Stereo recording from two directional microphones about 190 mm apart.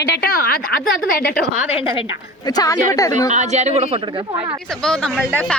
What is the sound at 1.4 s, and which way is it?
Speech, 5° right (ahead or behind).